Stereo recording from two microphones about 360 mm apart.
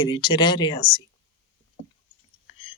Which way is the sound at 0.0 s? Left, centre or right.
Centre.